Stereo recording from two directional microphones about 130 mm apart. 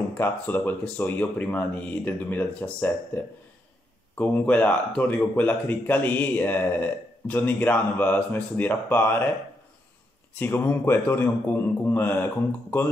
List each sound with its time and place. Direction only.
0.2 s speech: 15° left (ahead or behind)
10.3 s speech: 15° left (ahead or behind)